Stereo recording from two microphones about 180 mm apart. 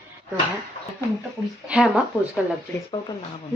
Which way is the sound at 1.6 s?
5° right (ahead or behind).